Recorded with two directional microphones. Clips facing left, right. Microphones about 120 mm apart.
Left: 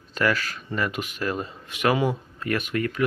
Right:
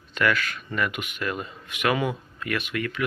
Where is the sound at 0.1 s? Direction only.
35° left (ahead or behind).